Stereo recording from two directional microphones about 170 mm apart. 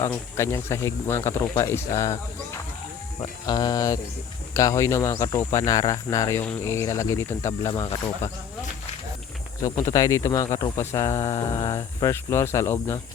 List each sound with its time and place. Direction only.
0.0 s speech: 15° left (ahead or behind)
3.2 s speech: 25° left (ahead or behind)
9.6 s speech: 20° left (ahead or behind)